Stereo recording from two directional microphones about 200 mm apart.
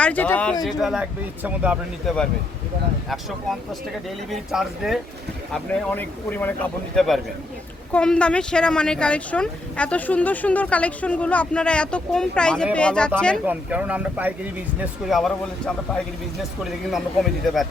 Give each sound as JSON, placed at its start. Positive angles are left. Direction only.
{"t": 0.0, "sound": "speech", "side_deg": 10}
{"t": 4.3, "sound": "speech", "side_deg": 0}